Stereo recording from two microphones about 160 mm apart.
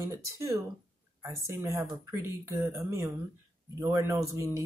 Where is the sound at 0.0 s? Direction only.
20° right (ahead or behind).